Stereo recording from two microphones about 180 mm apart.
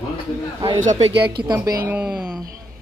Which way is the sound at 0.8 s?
35° right (ahead or behind).